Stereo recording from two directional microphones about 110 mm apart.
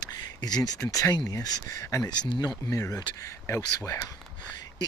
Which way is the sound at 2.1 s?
40° left (ahead or behind).